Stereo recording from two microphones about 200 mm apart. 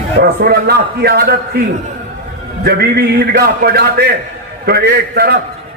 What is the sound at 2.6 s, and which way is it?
A man's voice, 55° right (ahead or behind).